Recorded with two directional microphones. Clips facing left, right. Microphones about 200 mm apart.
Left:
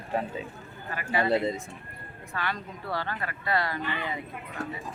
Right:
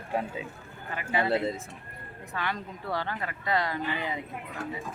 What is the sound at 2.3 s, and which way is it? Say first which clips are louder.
Speech: even; 20° right (ahead or behind).